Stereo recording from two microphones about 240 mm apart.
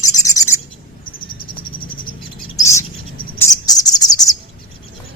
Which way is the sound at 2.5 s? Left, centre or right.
Centre.